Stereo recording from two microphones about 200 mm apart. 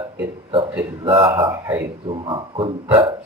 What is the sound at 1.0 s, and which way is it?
Speech, 25° right (ahead or behind).